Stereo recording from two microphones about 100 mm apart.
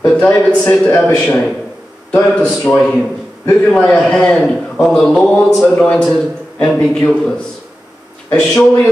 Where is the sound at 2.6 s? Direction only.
Centre (ahead or behind).